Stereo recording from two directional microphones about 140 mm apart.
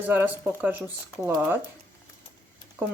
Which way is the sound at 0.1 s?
10° right (ahead or behind).